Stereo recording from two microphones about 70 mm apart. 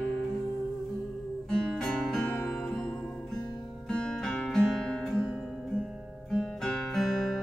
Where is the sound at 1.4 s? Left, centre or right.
Centre.